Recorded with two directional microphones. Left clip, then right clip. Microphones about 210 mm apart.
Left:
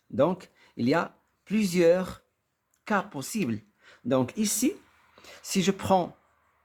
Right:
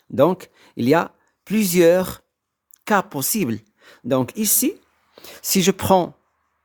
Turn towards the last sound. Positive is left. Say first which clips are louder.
# right 8 dB
turn(degrees=-45)  # may be behind; listen again after turning